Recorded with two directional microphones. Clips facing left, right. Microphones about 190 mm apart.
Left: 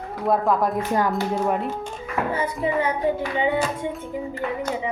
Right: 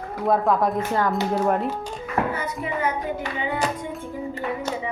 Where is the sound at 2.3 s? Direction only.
30° left (ahead or behind).